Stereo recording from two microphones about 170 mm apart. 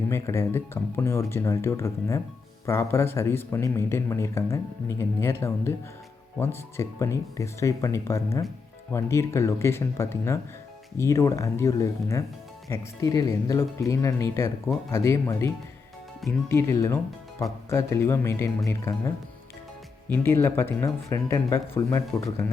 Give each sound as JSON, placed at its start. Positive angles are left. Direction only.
{"t": 0.1, "sound": "speech", "side_deg": 15}